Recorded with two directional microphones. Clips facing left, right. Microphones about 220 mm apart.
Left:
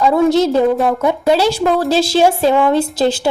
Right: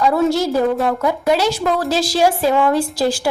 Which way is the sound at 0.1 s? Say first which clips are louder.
Left 4 dB; 20° left (ahead or behind).